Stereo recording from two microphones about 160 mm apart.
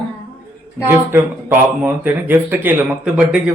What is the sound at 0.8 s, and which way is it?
Speech, 15° right (ahead or behind).